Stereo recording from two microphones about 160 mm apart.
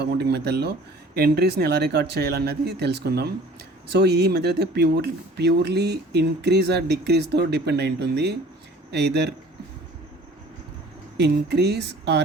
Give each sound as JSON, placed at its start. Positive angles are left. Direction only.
{"t": 0.0, "sound": "speech", "side_deg": -90}
{"t": 1.1, "sound": "speech", "side_deg": -75}
{"t": 11.2, "sound": "speech", "side_deg": -90}